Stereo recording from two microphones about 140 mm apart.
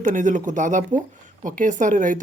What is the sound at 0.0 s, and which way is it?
A woman's voice, 65° right (ahead or behind).